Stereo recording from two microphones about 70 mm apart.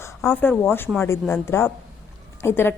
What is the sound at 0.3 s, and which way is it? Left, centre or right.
A woman's voice, left.